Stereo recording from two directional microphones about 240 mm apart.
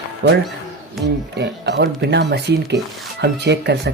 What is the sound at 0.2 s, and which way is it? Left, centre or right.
Speech, right.